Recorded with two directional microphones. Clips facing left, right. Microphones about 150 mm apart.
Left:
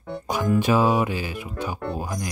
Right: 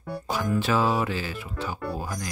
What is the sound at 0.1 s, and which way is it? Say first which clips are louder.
Speech: left 4 dB; 20° left (ahead or behind).